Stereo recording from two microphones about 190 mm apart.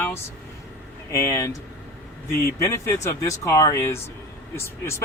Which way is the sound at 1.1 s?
15° left (ahead or behind).